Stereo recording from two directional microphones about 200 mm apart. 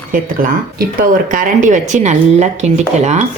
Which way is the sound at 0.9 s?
40° right (ahead or behind).